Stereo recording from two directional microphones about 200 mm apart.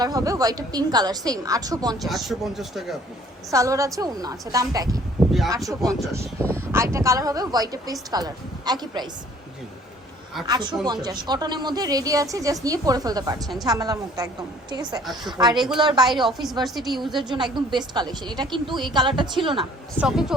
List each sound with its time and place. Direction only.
0.0 s a woman's voice: 20° right (ahead or behind)
2.0 s speech: centre (ahead or behind)
3.5 s a woman's voice: 15° right (ahead or behind)
5.2 s a sound: centre (ahead or behind)
5.5 s a woman's voice: 15° right (ahead or behind)
10.4 s a woman's voice: 20° right (ahead or behind)
15.0 s speech: centre (ahead or behind)
15.3 s a woman's voice: 20° right (ahead or behind)
15.5 s speech: centre (ahead or behind)
15.8 s a woman's voice: 20° right (ahead or behind)
16.0 s speech: centre (ahead or behind)
17.2 s a woman's voice: 20° right (ahead or behind)
20.0 s speech: 5° right (ahead or behind)